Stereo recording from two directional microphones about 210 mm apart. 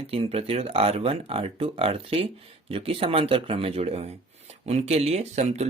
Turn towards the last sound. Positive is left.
turn(degrees=-30)  # may be behind; listen again after turning